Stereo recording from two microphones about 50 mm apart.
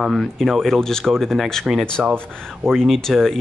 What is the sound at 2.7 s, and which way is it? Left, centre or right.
Speech, centre.